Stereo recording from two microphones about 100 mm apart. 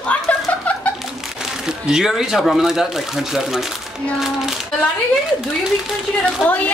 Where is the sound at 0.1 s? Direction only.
15° left (ahead or behind).